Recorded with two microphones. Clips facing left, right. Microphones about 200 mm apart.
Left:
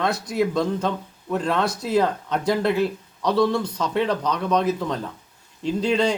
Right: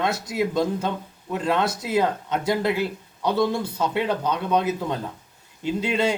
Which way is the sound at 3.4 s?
5° right (ahead or behind).